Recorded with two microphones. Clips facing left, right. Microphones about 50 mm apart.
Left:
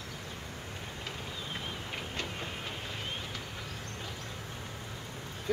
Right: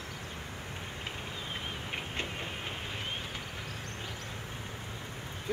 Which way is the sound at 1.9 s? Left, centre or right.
Right.